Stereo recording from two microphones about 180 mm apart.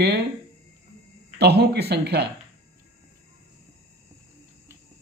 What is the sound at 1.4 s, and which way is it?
Speech, 65° right (ahead or behind).